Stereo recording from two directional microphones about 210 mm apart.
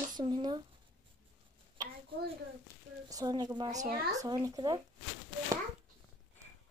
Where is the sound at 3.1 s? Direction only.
20° right (ahead or behind).